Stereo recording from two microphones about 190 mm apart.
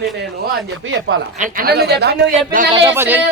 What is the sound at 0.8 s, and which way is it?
Speech, 75° right (ahead or behind).